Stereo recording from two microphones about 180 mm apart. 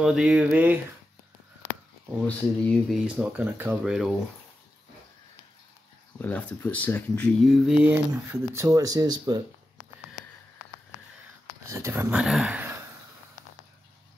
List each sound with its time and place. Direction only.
0.0 s speech: 5° right (ahead or behind)
2.2 s speech: 10° left (ahead or behind)
3.2 s speech: 10° right (ahead or behind)
6.1 s speech: 10° left (ahead or behind)
8.1 s speech: 15° right (ahead or behind)
11.7 s speech: 15° right (ahead or behind)
12.2 s speech: 5° right (ahead or behind)